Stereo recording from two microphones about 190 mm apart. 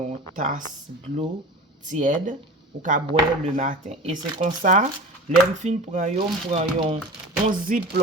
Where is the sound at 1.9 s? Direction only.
40° right (ahead or behind).